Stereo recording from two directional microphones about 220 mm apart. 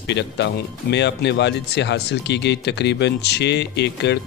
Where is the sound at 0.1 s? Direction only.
50° left (ahead or behind).